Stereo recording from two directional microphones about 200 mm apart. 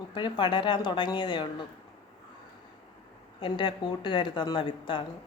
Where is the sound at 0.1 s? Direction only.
25° left (ahead or behind).